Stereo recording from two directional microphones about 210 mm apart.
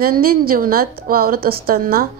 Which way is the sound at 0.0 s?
45° right (ahead or behind).